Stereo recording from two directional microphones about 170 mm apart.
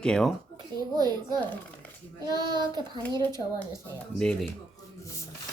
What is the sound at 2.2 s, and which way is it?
Child singing, 25° right (ahead or behind).